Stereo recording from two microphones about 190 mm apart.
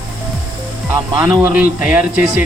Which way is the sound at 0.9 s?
10° right (ahead or behind).